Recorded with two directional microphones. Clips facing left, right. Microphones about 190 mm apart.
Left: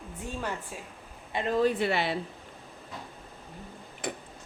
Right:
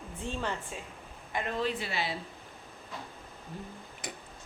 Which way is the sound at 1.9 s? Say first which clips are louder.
Left 6 dB; 60° left (ahead or behind).